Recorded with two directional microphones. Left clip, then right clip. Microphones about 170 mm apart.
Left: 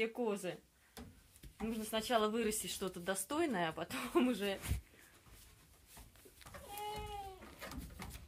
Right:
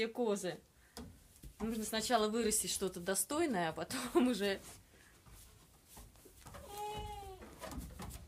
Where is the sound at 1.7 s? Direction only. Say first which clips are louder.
Right 1 dB; centre (ahead or behind).